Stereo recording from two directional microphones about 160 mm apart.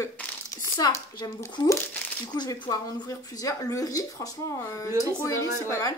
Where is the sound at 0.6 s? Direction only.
20° left (ahead or behind).